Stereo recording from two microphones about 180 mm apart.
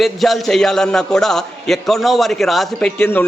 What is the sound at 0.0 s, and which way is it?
A man's voice, centre (ahead or behind).